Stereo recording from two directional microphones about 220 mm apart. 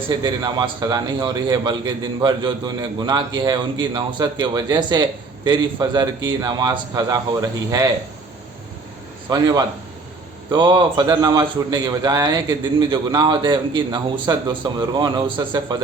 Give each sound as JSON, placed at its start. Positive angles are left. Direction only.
{"t": 0.1, "sound": "a man's voice", "side_deg": -20}
{"t": 9.3, "sound": "a man's voice", "side_deg": -15}